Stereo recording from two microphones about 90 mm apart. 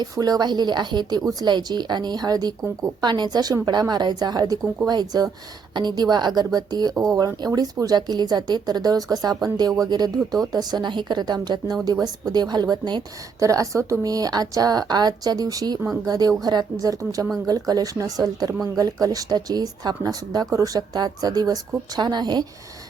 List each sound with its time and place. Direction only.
0.0 s speech: 50° right (ahead or behind)
13.4 s speech: 35° right (ahead or behind)